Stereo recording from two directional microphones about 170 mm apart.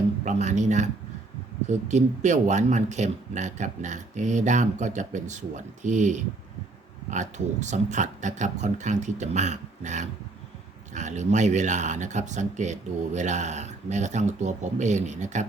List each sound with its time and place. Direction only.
0.3 s speech: 45° right (ahead or behind)
1.9 s speech: 45° right (ahead or behind)